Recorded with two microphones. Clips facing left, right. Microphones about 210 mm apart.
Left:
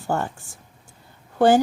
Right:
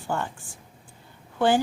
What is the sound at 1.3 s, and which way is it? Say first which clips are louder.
Speech: left 5 dB; 45° left (ahead or behind).